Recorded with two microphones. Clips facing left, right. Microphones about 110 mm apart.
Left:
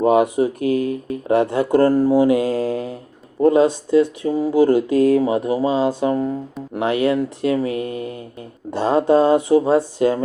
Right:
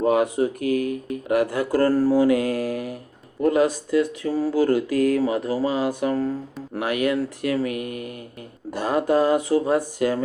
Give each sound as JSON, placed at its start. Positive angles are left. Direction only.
{"t": 0.0, "sound": "speech", "side_deg": 20}